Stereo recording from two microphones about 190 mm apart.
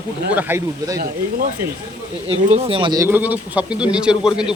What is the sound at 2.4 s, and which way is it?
Speech, 30° right (ahead or behind).